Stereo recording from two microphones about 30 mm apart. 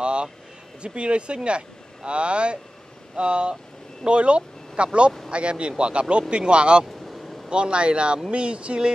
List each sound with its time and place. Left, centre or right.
0.0 s vehicle: right
0.8 s speech: right